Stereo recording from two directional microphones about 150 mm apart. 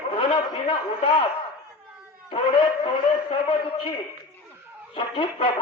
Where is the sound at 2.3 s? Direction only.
35° left (ahead or behind).